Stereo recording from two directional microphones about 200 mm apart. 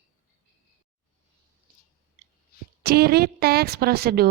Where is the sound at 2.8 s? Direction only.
50° right (ahead or behind).